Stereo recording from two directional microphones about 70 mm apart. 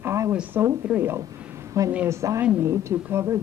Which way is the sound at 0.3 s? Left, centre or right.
Right.